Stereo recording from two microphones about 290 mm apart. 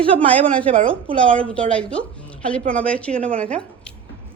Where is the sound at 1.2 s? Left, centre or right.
Centre.